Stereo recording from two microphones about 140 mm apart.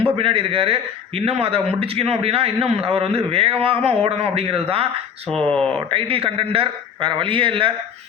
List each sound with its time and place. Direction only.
0.2 s a man's voice: 40° right (ahead or behind)
5.3 s speech: 5° left (ahead or behind)
5.9 s a man's voice: 40° right (ahead or behind)